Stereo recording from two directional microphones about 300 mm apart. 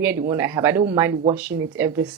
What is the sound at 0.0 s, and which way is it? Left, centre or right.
Speech, centre.